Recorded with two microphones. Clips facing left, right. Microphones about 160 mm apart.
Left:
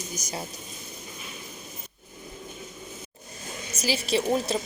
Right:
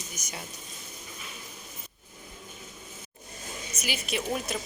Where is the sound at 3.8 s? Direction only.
30° left (ahead or behind).